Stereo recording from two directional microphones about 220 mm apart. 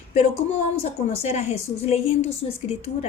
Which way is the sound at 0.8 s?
30° left (ahead or behind).